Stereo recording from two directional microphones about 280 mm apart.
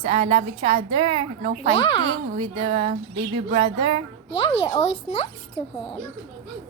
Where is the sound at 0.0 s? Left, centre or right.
Right.